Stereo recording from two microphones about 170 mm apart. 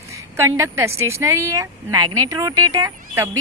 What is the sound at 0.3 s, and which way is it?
A woman's voice, 15° right (ahead or behind).